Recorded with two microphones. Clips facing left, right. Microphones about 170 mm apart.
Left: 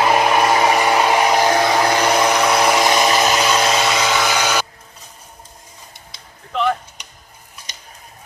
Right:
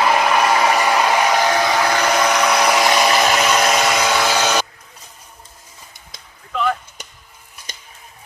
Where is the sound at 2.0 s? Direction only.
25° left (ahead or behind); by 4.0 s centre (ahead or behind).